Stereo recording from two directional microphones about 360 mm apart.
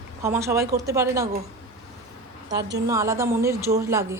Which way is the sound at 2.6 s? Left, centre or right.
Right.